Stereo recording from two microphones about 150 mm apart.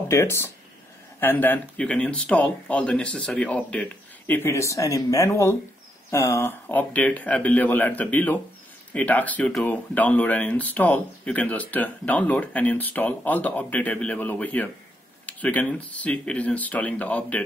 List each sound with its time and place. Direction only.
0.1 s speech: 15° left (ahead or behind)